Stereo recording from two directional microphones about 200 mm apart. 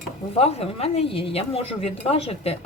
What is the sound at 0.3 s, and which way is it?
Speech, 30° left (ahead or behind).